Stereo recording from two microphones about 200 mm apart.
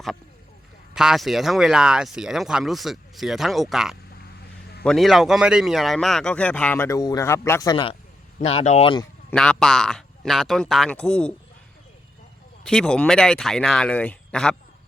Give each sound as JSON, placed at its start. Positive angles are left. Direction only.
{"t": 0.9, "sound": "a man's voice", "side_deg": 0}
{"t": 8.4, "sound": "speech", "side_deg": 35}
{"t": 9.3, "sound": "a man's voice", "side_deg": 5}
{"t": 12.6, "sound": "a man's voice", "side_deg": 5}